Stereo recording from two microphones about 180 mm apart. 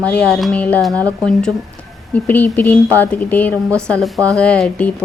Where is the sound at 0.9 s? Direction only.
20° right (ahead or behind).